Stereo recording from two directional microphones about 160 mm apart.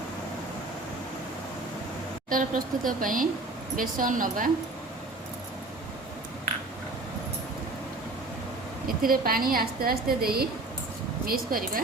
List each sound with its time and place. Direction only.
2.3 s speech: 60° right (ahead or behind)
9.0 s a woman's voice: 65° right (ahead or behind)